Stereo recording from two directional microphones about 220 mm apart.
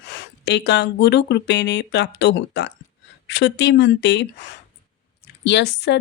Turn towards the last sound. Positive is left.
turn(degrees=50)  # may be behind; listen again after turning